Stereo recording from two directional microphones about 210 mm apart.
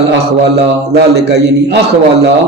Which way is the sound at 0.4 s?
50° right (ahead or behind).